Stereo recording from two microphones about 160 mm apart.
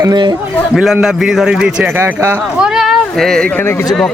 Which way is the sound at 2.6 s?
Centre (ahead or behind).